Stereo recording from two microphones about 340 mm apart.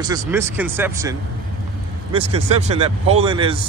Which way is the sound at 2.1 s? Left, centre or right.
Centre.